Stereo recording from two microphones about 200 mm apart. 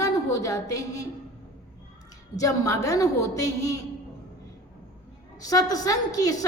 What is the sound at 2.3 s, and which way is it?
Speech, 15° left (ahead or behind).